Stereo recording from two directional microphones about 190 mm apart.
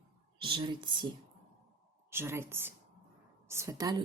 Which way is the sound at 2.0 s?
10° right (ahead or behind).